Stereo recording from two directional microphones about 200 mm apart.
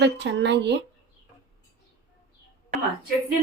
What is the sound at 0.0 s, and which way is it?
Speech, 65° right (ahead or behind).